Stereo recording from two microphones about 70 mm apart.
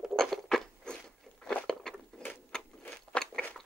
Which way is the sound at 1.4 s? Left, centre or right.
Centre.